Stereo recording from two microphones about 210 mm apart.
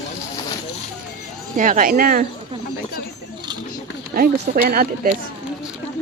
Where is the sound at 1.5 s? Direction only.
40° right (ahead or behind).